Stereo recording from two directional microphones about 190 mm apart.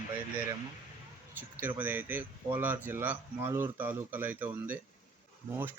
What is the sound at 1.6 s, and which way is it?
Speech, 10° right (ahead or behind).